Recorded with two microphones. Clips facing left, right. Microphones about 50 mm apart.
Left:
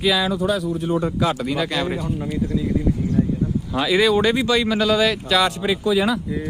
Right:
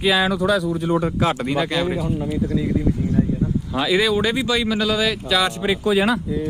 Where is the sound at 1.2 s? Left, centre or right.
Centre.